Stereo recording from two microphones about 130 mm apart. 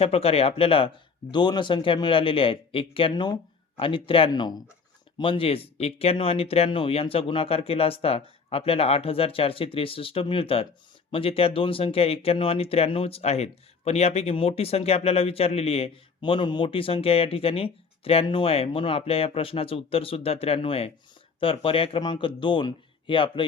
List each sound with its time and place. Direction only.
0.0 s a man's voice: 50° left (ahead or behind)
4.3 s a man's voice: 30° left (ahead or behind)